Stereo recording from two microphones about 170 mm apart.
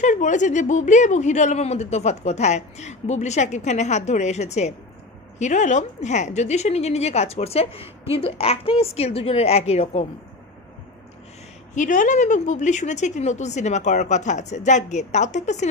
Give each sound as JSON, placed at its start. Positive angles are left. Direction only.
{"t": 0.0, "sound": "a woman's voice", "side_deg": 45}
{"t": 11.7, "sound": "a woman's voice", "side_deg": 50}